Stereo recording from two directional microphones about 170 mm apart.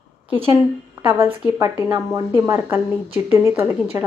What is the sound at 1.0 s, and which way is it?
A woman's voice, 15° right (ahead or behind).